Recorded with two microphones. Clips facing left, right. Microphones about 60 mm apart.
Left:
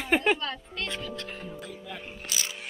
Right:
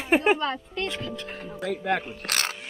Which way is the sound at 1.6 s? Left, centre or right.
Right.